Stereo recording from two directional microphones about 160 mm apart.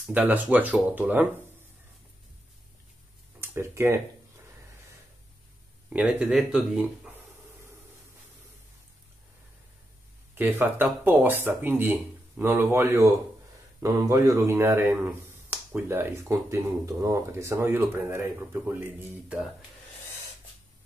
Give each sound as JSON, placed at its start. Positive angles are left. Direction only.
{"t": 0.1, "sound": "speech", "side_deg": -10}
{"t": 3.3, "sound": "speech", "side_deg": -15}
{"t": 5.9, "sound": "speech", "side_deg": -10}
{"t": 10.3, "sound": "speech", "side_deg": -15}